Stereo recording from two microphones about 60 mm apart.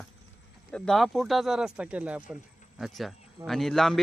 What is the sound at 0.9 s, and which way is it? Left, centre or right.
Speech, centre.